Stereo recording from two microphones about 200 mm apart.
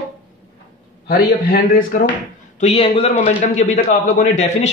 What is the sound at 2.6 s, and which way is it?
A man's voice, 30° left (ahead or behind).